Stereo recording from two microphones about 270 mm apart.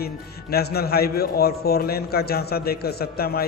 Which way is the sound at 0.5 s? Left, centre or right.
Left.